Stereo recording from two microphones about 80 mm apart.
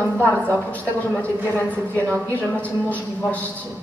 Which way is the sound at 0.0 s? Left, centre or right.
Left.